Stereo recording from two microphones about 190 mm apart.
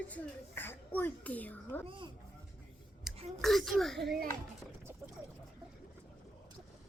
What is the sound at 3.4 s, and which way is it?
Speech, centre (ahead or behind).